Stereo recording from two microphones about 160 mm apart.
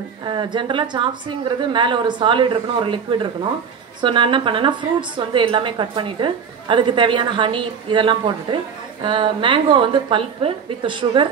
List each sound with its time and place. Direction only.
0.2 s a woman's voice: 30° right (ahead or behind)